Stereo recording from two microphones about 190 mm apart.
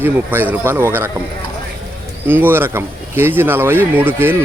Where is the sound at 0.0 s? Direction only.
10° right (ahead or behind).